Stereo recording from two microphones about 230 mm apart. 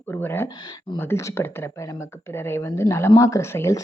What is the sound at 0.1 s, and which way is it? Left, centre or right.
Speech, centre.